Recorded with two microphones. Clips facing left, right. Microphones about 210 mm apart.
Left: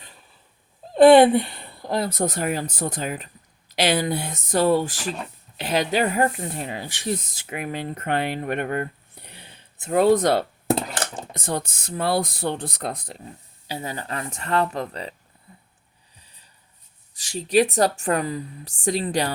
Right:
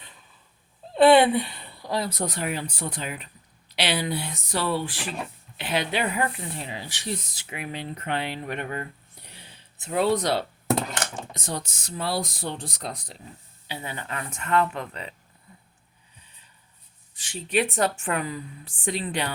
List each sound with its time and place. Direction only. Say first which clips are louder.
0.9 s speech: left 5 dB; 45° left (ahead or behind)
13.7 s a woman's voice: left 4 dB; 35° left (ahead or behind)
17.2 s a woman's voice: left 6 dB; 40° left (ahead or behind)